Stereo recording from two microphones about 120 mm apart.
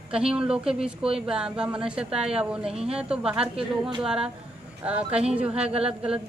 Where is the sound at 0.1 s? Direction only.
5° right (ahead or behind).